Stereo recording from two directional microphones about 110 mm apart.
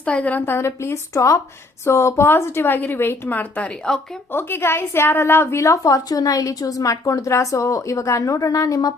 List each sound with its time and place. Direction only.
0.0 s a woman's voice: 10° left (ahead or behind); by 8.9 s 35° left (ahead or behind)